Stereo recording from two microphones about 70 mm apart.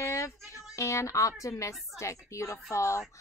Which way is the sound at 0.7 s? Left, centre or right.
Left.